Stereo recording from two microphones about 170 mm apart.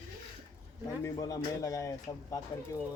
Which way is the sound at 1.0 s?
20° left (ahead or behind).